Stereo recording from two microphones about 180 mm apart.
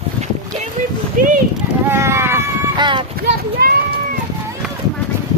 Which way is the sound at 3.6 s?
60° right (ahead or behind).